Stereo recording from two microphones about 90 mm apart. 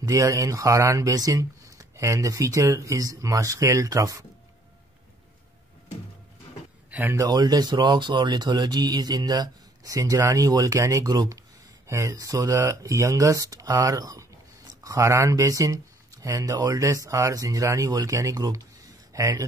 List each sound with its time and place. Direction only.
0.0 s speech: 35° right (ahead or behind)
6.9 s a sound: 20° right (ahead or behind)
7.2 s speech: 45° right (ahead or behind)
16.5 s speech: 50° right (ahead or behind)
16.8 s speech: 35° right (ahead or behind)